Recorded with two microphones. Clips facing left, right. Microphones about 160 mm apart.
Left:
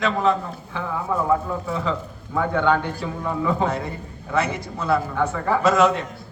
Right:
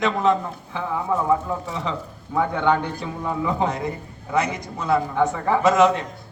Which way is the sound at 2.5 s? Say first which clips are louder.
Left 2 dB; 20° right (ahead or behind).